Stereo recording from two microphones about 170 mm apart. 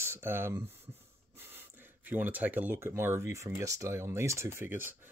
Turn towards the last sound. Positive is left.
turn(degrees=-15)  # may be behind; listen again after turning